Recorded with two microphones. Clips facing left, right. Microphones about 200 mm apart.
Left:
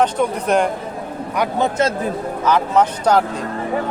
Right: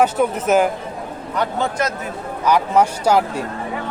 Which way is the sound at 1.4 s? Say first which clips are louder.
Left 2 dB; 15° left (ahead or behind).